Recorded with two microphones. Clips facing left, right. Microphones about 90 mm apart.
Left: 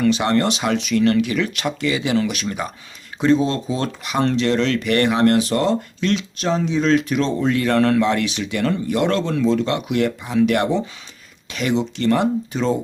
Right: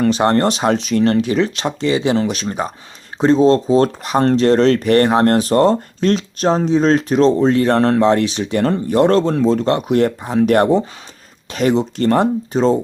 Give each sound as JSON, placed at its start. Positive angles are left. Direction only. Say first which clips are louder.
{"t": 0.0, "sound": "speech", "louder": "right 3 dB", "side_deg": -40}